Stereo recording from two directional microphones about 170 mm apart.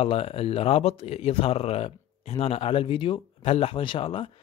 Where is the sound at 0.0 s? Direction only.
35° left (ahead or behind).